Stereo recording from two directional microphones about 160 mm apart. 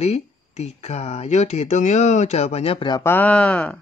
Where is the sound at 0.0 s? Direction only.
45° left (ahead or behind).